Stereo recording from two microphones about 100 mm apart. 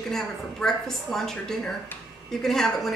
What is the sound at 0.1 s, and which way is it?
A woman's voice, 5° left (ahead or behind).